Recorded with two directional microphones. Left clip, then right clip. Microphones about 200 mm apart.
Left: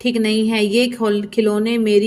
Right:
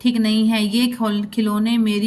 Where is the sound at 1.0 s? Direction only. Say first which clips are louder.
Left 6 dB; 20° left (ahead or behind).